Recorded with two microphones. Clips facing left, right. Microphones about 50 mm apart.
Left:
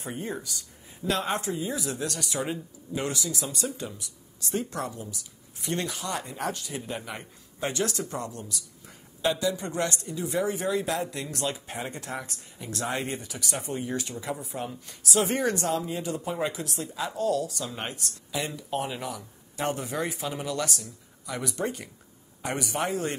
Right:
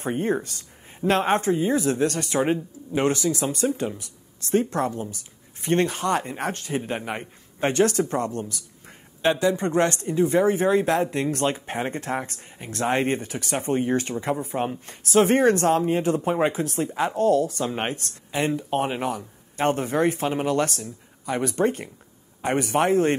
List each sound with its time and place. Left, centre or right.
0.0 s speech: right